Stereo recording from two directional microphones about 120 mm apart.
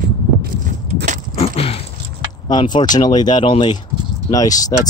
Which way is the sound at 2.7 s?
35° left (ahead or behind).